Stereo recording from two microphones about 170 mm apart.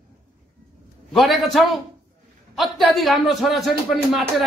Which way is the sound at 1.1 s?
Centre (ahead or behind).